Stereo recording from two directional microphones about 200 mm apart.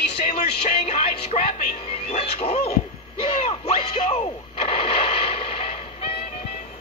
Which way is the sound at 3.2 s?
30° left (ahead or behind).